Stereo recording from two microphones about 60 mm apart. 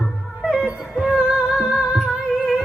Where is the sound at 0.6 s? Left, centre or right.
Centre.